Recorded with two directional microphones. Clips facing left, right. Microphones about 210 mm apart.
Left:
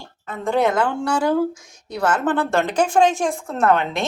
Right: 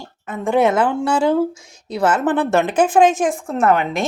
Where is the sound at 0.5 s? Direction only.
25° right (ahead or behind).